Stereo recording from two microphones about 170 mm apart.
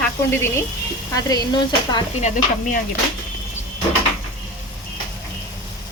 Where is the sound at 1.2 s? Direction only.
25° left (ahead or behind).